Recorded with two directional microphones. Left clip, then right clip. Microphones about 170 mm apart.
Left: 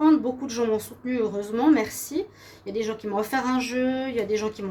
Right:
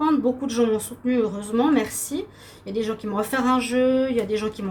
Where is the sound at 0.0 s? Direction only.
40° left (ahead or behind).